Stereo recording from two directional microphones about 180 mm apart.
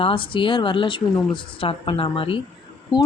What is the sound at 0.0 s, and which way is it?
Speech, 30° left (ahead or behind).